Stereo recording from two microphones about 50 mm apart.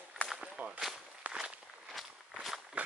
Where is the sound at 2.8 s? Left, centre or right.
Right.